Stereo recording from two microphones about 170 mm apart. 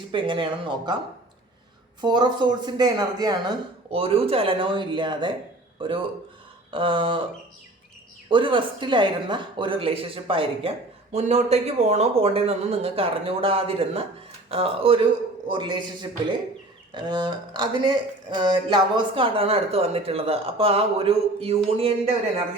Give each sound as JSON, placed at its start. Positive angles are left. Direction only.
{"t": 0.1, "sound": "speech", "side_deg": -30}
{"t": 2.0, "sound": "speech", "side_deg": -25}
{"t": 3.8, "sound": "speech", "side_deg": -35}
{"t": 8.3, "sound": "speech", "side_deg": -30}